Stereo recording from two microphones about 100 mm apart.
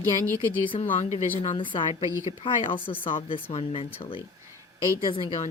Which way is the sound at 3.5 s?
90° left.